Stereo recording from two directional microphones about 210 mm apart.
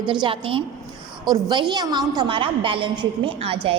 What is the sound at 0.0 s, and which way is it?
A woman's voice, 20° right (ahead or behind).